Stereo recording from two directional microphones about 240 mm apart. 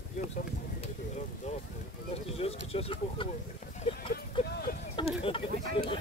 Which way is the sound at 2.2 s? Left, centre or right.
Left.